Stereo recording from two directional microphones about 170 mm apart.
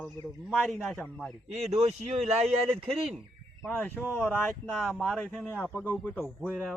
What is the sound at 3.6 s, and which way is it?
Speech, 10° left (ahead or behind).